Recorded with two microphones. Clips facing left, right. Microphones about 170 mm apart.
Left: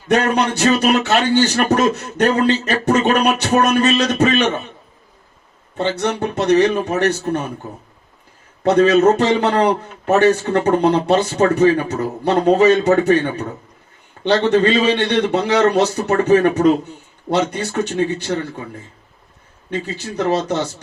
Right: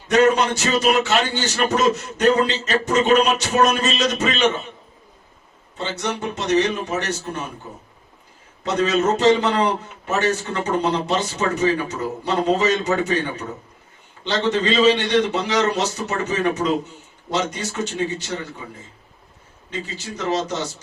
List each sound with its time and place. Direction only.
0.1 s a man's voice: 60° left (ahead or behind)
5.7 s a man's voice: 60° left (ahead or behind)
8.6 s a man's voice: 60° left (ahead or behind)
14.3 s a man's voice: 60° left (ahead or behind)
20.1 s a man's voice: 60° left (ahead or behind)